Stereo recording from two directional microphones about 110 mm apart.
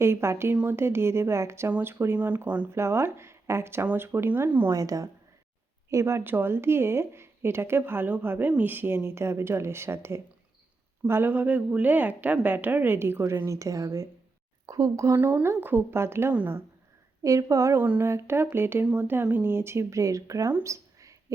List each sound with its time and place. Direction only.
0.0 s speech: 25° right (ahead or behind)
4.7 s a woman's voice: 30° right (ahead or behind); by 16.5 s 15° right (ahead or behind)
17.2 s speech: 30° right (ahead or behind)
20.5 s a sound: 20° right (ahead or behind)